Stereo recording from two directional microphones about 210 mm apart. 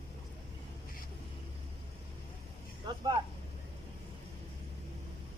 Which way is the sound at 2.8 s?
20° right (ahead or behind).